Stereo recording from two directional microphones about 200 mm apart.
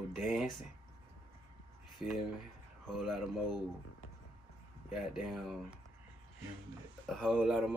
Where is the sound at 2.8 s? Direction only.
Centre (ahead or behind).